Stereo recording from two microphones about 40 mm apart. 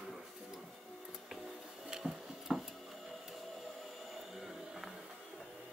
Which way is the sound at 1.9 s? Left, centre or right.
Right.